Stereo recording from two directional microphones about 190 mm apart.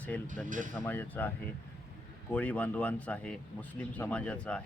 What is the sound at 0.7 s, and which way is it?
Speech, 10° left (ahead or behind).